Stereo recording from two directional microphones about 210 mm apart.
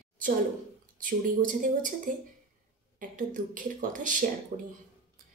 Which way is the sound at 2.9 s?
40° right (ahead or behind).